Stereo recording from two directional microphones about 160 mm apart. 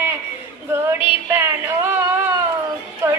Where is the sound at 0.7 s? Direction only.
15° right (ahead or behind).